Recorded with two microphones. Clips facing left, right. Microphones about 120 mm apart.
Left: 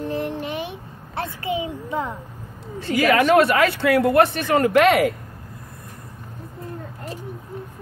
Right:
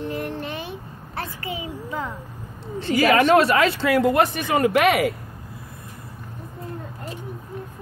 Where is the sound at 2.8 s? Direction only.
25° right (ahead or behind).